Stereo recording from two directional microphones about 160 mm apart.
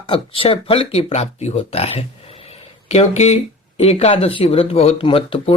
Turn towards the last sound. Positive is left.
turn(degrees=35)  # may be behind; listen again after turning